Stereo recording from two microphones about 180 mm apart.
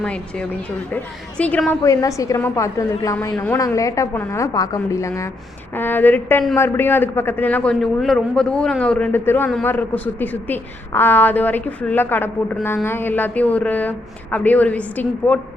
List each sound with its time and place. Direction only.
0.0 s a woman's voice: 5° left (ahead or behind)